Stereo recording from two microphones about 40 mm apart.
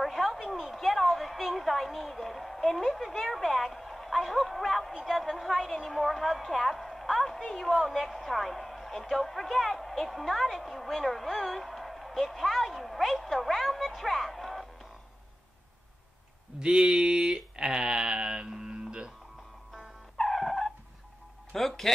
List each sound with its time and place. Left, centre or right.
0.0 s a woman's voice: centre
16.5 s sheep: right
20.2 s music: centre
21.5 s a woman's voice: centre